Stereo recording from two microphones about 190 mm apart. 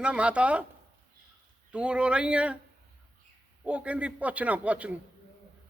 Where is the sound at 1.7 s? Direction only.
5° right (ahead or behind).